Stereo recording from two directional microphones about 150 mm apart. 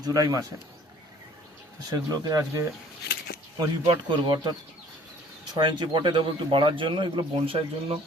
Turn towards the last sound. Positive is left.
turn(degrees=-35)  # may be behind; listen again after turning